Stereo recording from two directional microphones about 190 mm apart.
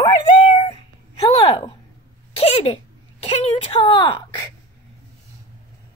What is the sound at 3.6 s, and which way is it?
Speech, 25° left (ahead or behind).